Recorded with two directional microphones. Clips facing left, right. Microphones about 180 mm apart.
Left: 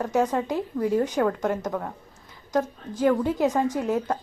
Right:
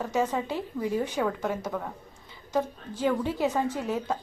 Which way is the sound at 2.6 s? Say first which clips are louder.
Left 4 dB; 10° left (ahead or behind).